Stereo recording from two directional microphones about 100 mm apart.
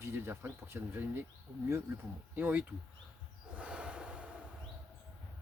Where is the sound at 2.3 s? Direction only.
15° right (ahead or behind).